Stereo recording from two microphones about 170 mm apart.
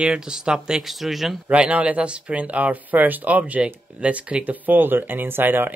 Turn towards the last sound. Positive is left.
turn(degrees=-10)  # may be behind; listen again after turning